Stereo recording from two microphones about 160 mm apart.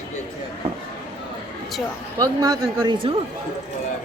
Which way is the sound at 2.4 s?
20° right (ahead or behind).